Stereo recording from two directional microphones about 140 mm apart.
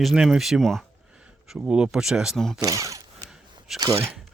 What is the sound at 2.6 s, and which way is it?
Speech, 25° right (ahead or behind).